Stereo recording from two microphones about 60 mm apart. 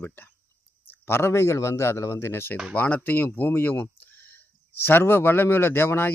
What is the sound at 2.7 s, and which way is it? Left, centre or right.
Speech, left.